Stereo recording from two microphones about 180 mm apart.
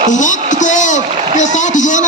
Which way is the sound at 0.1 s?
45° left (ahead or behind).